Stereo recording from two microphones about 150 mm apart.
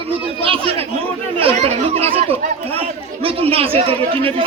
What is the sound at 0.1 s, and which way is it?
Chatter, 40° right (ahead or behind).